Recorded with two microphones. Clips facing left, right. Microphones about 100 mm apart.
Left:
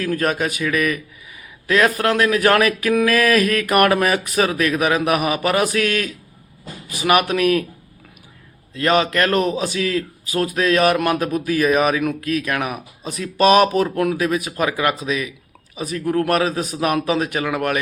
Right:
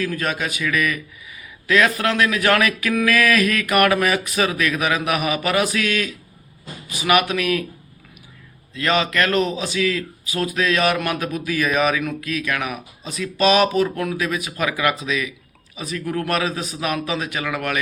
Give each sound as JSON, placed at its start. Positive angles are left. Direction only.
{"t": 0.0, "sound": "speech", "side_deg": 40}
{"t": 8.7, "sound": "speech", "side_deg": 40}
{"t": 17.4, "sound": "speech", "side_deg": 35}